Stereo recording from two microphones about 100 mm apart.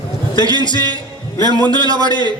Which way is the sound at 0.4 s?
40° right (ahead or behind).